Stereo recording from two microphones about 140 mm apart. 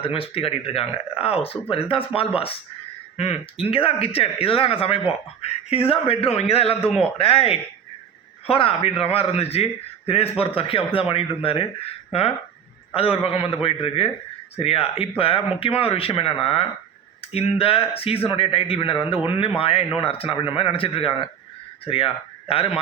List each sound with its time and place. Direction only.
0.0 s a man's voice: 40° left (ahead or behind)
12.9 s a man's voice: 40° left (ahead or behind)